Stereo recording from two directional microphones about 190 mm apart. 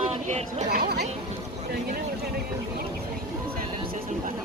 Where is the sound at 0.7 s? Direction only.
55° right (ahead or behind).